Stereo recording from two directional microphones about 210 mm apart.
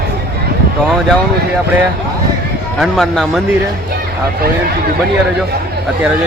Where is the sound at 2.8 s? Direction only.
Centre (ahead or behind).